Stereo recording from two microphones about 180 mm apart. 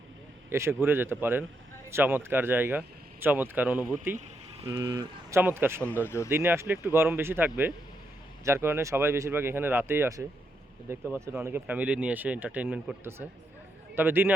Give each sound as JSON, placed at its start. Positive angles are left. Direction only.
{"t": 0.5, "sound": "speech", "side_deg": -15}
{"t": 6.1, "sound": "speech", "side_deg": 15}
{"t": 6.3, "sound": "speech", "side_deg": -10}